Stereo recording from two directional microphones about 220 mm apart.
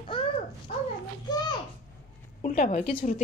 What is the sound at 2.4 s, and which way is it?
Speech, 35° left (ahead or behind).